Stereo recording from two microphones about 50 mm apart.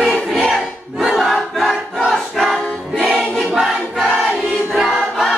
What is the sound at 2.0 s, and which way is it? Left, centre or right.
Music, centre.